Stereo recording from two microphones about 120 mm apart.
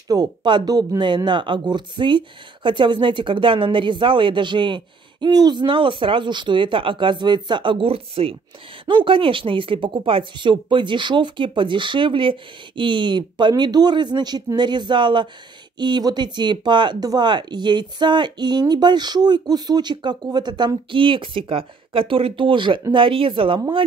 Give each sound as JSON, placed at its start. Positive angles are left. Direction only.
{"t": 0.1, "sound": "speech", "side_deg": -35}